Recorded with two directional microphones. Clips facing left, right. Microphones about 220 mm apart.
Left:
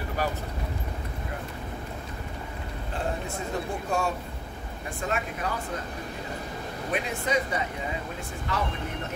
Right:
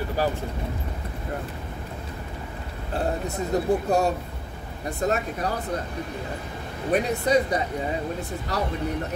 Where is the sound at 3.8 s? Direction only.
40° right (ahead or behind).